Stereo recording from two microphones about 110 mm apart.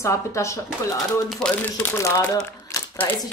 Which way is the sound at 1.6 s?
15° left (ahead or behind).